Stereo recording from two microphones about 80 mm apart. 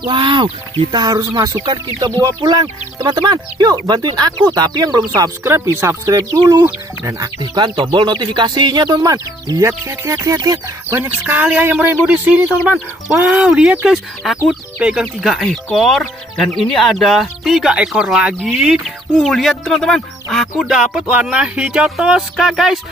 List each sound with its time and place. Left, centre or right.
0.0 s speech: right
0.9 s speech: right
7.2 s speech: right
9.8 s speech: right
10.3 s speech: right
11.0 s speech: centre
11.6 s speech: right
12.7 s speech: centre
19.1 s speech: centre
20.5 s speech: centre